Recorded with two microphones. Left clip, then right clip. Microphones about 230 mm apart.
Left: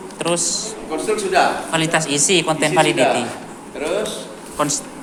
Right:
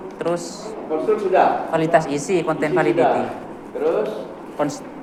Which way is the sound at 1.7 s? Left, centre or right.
Left.